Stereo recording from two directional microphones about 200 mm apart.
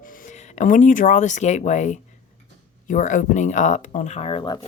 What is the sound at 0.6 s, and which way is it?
A woman's voice, 40° left (ahead or behind).